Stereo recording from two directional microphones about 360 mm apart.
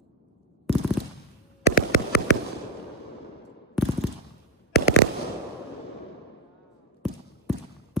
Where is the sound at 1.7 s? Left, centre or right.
Left.